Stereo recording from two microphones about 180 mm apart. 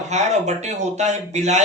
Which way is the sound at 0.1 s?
40° right (ahead or behind).